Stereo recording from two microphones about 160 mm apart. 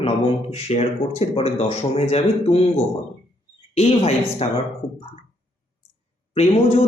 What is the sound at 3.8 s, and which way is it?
Speech, 40° left (ahead or behind).